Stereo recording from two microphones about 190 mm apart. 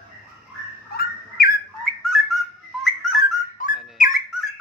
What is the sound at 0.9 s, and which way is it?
Bird, 55° left (ahead or behind).